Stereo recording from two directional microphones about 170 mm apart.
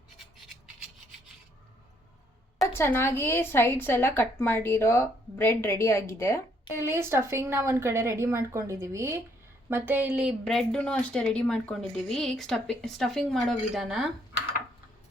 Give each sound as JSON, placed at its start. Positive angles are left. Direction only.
{"t": 2.6, "sound": "a woman's voice", "side_deg": 15}
{"t": 6.7, "sound": "a woman's voice", "side_deg": -15}